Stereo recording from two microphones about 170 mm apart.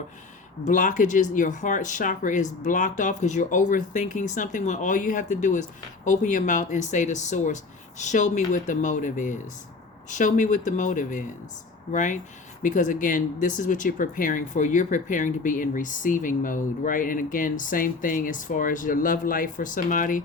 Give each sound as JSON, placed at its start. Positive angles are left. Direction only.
{"t": 0.6, "sound": "speech", "side_deg": 50}